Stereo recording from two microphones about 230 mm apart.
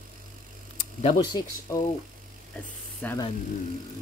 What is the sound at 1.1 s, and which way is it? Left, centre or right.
Speech, centre.